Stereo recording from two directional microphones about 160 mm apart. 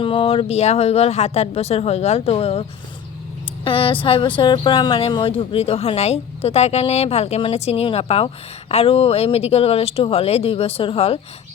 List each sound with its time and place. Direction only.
0.0 s speech: 35° left (ahead or behind)